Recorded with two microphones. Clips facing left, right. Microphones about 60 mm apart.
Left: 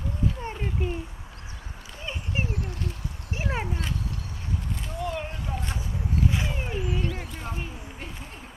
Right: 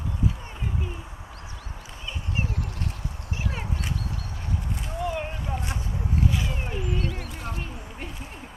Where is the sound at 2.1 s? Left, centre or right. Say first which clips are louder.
Left 1 dB; left.